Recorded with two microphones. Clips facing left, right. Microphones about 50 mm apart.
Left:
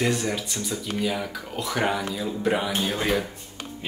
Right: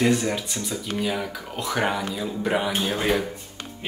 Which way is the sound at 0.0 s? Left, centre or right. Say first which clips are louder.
Right 3 dB; centre.